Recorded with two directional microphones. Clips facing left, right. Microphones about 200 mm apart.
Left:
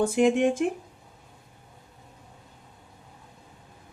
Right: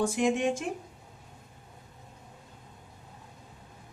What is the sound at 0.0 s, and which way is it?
Speech, 55° left (ahead or behind).